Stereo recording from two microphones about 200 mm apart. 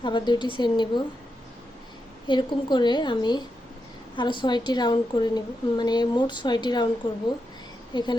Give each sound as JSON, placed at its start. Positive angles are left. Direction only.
{"t": 0.0, "sound": "a woman's voice", "side_deg": 20}
{"t": 2.2, "sound": "a woman's voice", "side_deg": 25}